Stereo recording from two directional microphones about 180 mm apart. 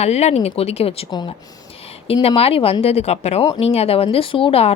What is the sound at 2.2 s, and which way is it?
Speech, 35° left (ahead or behind).